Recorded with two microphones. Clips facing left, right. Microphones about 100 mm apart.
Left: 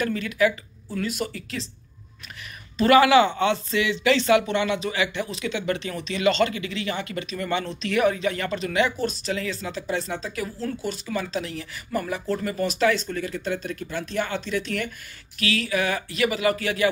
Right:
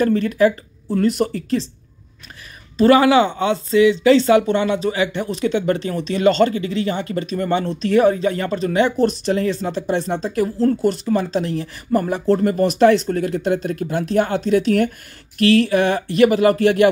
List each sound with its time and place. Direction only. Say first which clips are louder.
0.0 s speech: right 7 dB; 35° right (ahead or behind)
2.8 s speech: right 4 dB; 25° right (ahead or behind)
5.2 s speech: right 8 dB; 45° right (ahead or behind)
9.0 s speech: right 9 dB; 45° right (ahead or behind)
10.1 s speech: right 10 dB; 40° right (ahead or behind)